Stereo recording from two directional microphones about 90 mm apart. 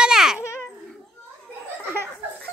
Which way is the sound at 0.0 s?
5° right (ahead or behind).